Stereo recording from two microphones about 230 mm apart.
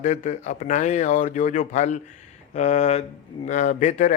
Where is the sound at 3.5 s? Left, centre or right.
Left.